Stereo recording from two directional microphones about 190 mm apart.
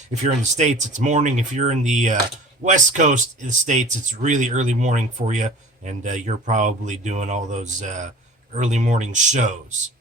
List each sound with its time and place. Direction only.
0.3 s speech: 35° right (ahead or behind)